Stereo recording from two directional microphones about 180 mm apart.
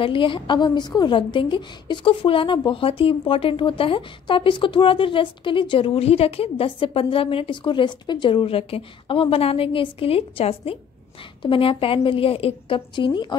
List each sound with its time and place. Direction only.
0.0 s a woman's voice: 30° left (ahead or behind)